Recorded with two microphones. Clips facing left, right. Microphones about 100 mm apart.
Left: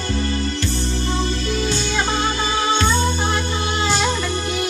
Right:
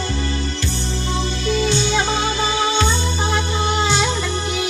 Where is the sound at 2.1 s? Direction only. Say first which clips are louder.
Right 1 dB; 45° left (ahead or behind).